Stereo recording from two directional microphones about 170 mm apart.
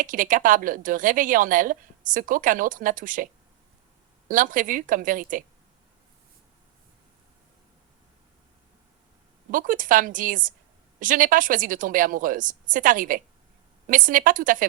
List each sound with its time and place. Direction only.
0.0 s speech: 50° right (ahead or behind)
4.3 s speech: 50° right (ahead or behind)
9.5 s speech: 50° right (ahead or behind)